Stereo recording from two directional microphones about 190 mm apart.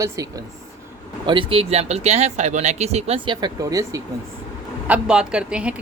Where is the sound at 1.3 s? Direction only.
30° right (ahead or behind).